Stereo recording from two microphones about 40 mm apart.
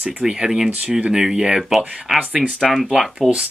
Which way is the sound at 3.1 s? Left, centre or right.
Right.